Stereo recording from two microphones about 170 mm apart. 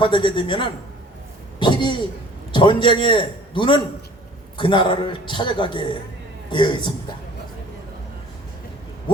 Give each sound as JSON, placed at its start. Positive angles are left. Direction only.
{"t": 0.0, "sound": "a man's voice", "side_deg": 30}
{"t": 1.5, "sound": "a sound", "side_deg": 30}
{"t": 2.5, "sound": "a man's voice", "side_deg": 30}